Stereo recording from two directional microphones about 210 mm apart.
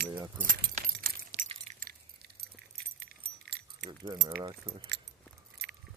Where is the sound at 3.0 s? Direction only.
50° right (ahead or behind).